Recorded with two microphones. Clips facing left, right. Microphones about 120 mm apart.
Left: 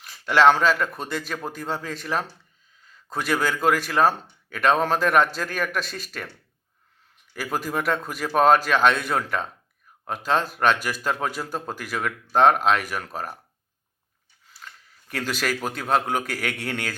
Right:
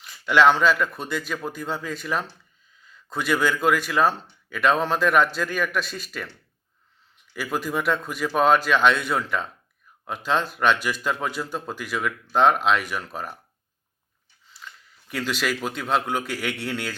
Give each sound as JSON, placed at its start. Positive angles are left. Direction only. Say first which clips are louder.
{"t": 0.3, "sound": "speech", "louder": "even", "side_deg": 35}
{"t": 3.1, "sound": "speech", "louder": "right 1 dB", "side_deg": 40}
{"t": 7.3, "sound": "speech", "louder": "even", "side_deg": 40}
{"t": 15.0, "sound": "a man's voice", "louder": "right 1 dB", "side_deg": 40}